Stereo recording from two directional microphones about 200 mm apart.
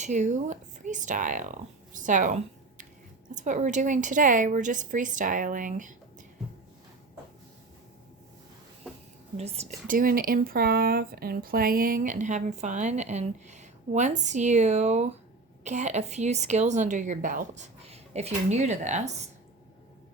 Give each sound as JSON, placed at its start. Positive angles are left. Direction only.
{"t": 0.0, "sound": "speech", "side_deg": -35}
{"t": 9.4, "sound": "speech", "side_deg": -35}